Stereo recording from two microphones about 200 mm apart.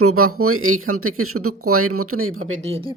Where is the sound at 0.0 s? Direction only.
90° right.